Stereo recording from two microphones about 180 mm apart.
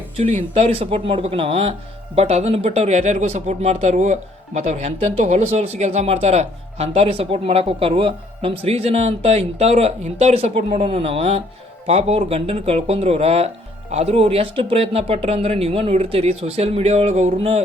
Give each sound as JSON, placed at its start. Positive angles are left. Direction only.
{"t": 0.2, "sound": "speech", "side_deg": -40}